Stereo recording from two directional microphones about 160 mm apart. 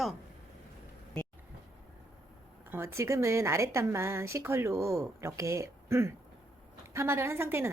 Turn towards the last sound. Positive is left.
turn(degrees=-15)  # may be behind; listen again after turning